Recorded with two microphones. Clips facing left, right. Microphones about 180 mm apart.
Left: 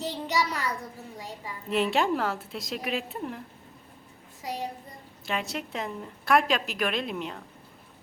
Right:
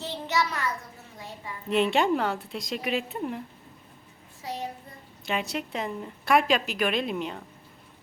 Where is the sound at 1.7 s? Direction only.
Centre (ahead or behind).